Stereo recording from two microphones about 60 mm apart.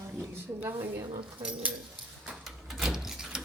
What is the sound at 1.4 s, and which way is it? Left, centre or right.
Speech, right.